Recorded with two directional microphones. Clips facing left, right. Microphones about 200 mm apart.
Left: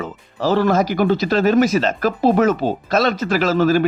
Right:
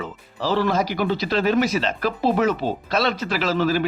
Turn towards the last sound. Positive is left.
turn(degrees=45)  # may be behind; listen again after turning